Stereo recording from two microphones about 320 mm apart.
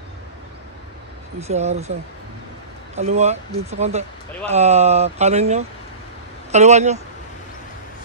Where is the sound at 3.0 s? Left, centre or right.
Centre.